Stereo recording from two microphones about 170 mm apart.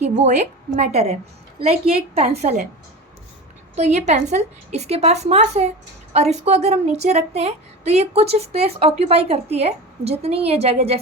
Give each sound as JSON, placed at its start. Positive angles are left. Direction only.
{"t": 0.0, "sound": "a woman's voice", "side_deg": -45}
{"t": 3.8, "sound": "a woman's voice", "side_deg": -40}